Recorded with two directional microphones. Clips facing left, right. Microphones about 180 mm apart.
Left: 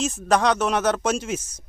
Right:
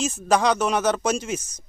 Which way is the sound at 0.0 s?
Centre (ahead or behind).